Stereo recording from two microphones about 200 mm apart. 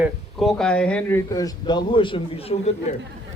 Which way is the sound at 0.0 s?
Centre (ahead or behind).